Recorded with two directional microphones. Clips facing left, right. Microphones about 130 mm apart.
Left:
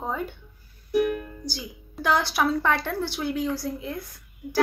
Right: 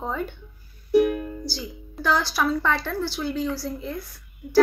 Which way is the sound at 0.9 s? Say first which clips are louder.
Right 4 dB; 25° right (ahead or behind).